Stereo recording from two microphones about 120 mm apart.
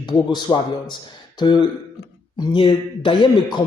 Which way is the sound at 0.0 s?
35° left (ahead or behind).